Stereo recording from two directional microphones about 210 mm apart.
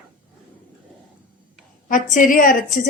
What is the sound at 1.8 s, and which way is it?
Speech, 40° left (ahead or behind).